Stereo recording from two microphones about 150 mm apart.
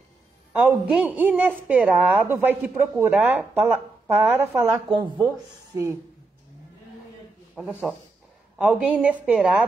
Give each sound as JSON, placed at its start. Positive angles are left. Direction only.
{"t": 0.5, "sound": "a woman's voice", "side_deg": -10}
{"t": 4.8, "sound": "speech", "side_deg": -35}
{"t": 7.5, "sound": "a woman's voice", "side_deg": -5}